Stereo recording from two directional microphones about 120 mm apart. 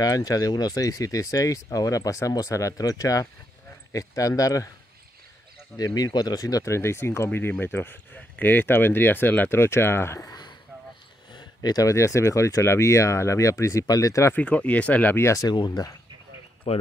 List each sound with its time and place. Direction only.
0.0 s speech: 30° left (ahead or behind)
5.8 s speech: 30° left (ahead or behind)
14.3 s speech: 10° left (ahead or behind)
15.5 s speech: 40° left (ahead or behind)
16.6 s speech: 55° left (ahead or behind)